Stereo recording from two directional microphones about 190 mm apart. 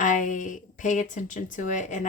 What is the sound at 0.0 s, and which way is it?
A woman's voice, 40° left (ahead or behind).